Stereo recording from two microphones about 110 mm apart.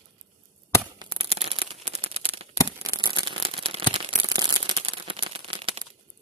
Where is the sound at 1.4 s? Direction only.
65° right (ahead or behind).